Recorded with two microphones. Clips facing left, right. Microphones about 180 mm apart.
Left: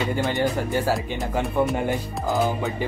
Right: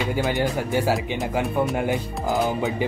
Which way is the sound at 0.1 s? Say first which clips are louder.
Even; centre (ahead or behind).